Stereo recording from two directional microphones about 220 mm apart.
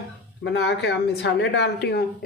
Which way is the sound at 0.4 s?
50° left (ahead or behind).